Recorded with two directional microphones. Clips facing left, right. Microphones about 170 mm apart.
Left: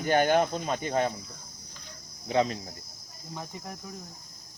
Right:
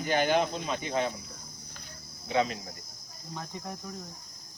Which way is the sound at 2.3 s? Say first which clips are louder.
Left 2 dB; 35° left (ahead or behind).